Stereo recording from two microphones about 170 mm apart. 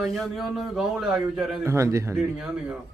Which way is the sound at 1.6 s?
15° right (ahead or behind).